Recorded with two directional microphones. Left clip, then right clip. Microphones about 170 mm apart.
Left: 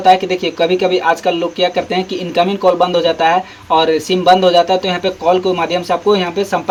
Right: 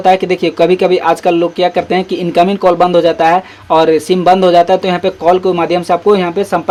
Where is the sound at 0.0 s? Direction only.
45° right (ahead or behind).